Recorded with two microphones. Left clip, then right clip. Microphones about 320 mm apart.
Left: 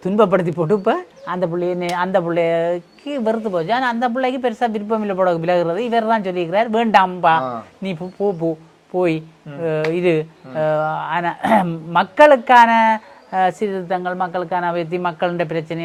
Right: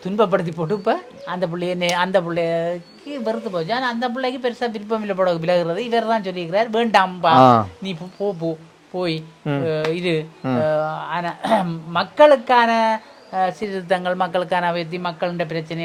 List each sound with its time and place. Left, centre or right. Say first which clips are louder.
0.0 s speech: left 3 dB; left
1.5 s speech: right 3 dB; left
2.2 s speech: left 4 dB; left